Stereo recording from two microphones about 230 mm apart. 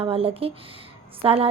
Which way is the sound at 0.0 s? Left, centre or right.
Right.